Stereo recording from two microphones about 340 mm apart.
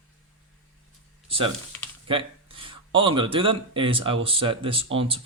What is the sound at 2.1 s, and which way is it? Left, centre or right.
Speech, centre.